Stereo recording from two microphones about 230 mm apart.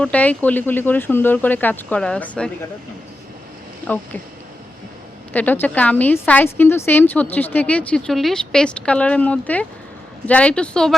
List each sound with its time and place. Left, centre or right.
0.0 s a woman's voice: centre
3.8 s a woman's voice: centre
5.3 s a woman's voice: centre